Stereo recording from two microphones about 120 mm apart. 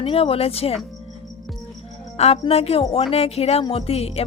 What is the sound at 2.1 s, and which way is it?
Speech, 60° left (ahead or behind).